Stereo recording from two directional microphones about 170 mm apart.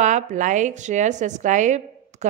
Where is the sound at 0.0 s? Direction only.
45° right (ahead or behind).